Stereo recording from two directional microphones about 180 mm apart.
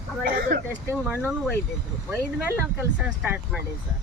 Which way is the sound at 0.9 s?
10° right (ahead or behind).